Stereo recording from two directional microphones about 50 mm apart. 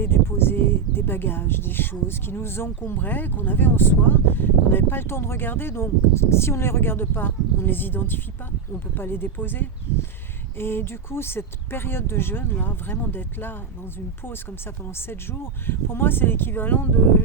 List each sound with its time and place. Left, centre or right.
0.0 s speech: left
15.1 s speech: left